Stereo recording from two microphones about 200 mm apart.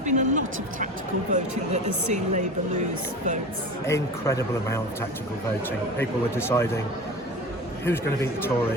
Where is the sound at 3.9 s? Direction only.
15° left (ahead or behind).